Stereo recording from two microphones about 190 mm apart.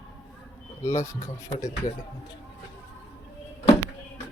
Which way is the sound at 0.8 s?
15° left (ahead or behind).